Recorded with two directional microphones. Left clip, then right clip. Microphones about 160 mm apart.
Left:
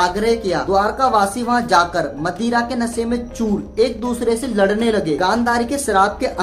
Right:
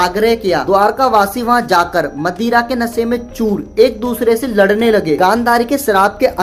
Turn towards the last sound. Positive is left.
turn(degrees=-30)  # may be behind; listen again after turning